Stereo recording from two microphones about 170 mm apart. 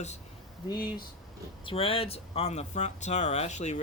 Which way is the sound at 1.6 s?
35° left (ahead or behind).